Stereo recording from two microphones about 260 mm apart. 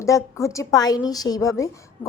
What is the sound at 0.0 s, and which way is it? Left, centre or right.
A woman's voice, centre.